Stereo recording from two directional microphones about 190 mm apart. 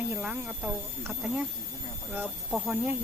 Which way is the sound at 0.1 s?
10° right (ahead or behind).